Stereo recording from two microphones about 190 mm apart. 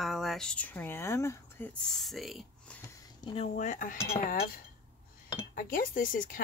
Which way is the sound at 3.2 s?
30° left (ahead or behind).